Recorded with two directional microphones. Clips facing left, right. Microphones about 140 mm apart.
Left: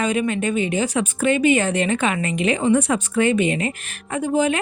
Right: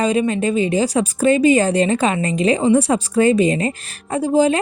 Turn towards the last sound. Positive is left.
turn(degrees=-35)  # may be behind; listen again after turning